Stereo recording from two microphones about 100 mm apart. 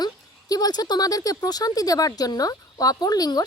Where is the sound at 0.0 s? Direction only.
40° left (ahead or behind).